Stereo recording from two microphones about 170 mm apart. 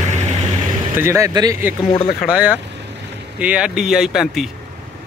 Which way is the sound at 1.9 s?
35° left (ahead or behind).